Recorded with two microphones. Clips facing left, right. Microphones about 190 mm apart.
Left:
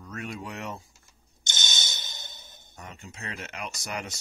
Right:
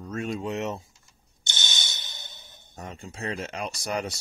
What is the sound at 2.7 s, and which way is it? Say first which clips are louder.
Speech: right 5 dB; 30° right (ahead or behind).